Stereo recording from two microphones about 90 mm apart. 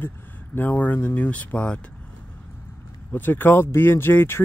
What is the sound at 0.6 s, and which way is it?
Speech, 20° left (ahead or behind).